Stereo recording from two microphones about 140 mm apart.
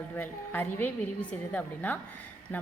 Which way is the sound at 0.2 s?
15° left (ahead or behind).